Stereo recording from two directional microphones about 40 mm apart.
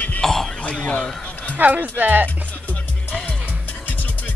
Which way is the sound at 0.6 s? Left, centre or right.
Left.